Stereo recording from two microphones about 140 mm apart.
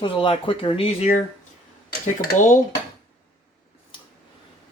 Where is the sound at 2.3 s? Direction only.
65° left (ahead or behind).